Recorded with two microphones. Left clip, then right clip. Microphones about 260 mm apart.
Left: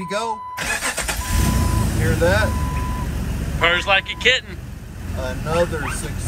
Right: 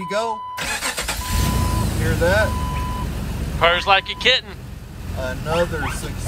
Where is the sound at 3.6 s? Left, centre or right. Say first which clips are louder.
Right 1 dB; centre.